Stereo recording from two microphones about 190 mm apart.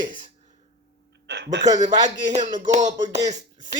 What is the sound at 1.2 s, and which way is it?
Speech, 65° right (ahead or behind).